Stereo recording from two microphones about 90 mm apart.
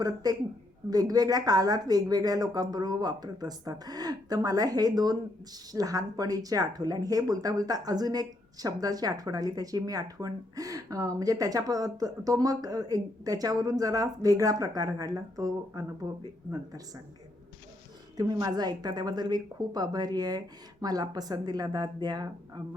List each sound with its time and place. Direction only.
0.0 s speech: 45° right (ahead or behind)
18.2 s speech: 45° right (ahead or behind)